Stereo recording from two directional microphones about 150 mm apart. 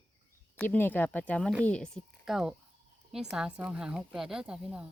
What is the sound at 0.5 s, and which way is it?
A woman's voice, 10° left (ahead or behind).